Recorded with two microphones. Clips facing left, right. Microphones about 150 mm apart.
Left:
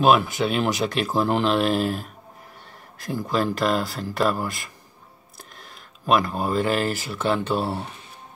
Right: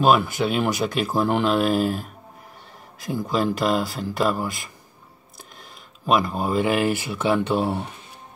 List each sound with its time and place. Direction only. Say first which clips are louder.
0.0 s speech: even; centre (ahead or behind)
5.4 s a sound: even; centre (ahead or behind)
6.6 s speech: right 2 dB; 15° right (ahead or behind)